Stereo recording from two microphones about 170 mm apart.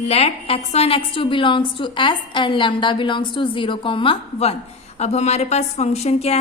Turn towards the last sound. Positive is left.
turn(degrees=40)  # may be behind; listen again after turning